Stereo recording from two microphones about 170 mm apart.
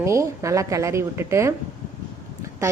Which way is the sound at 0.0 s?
20° right (ahead or behind).